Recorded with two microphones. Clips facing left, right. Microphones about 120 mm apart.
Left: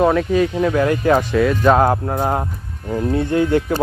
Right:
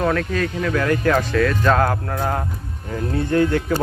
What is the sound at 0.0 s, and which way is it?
Speech, 15° left (ahead or behind).